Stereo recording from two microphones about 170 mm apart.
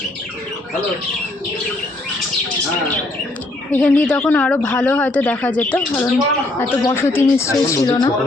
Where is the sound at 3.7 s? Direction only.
5° left (ahead or behind).